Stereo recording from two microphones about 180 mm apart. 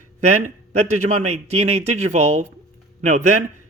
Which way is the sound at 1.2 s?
35° right (ahead or behind).